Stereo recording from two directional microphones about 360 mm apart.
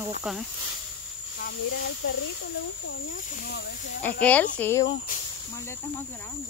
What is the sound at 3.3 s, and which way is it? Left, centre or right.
Speech, left.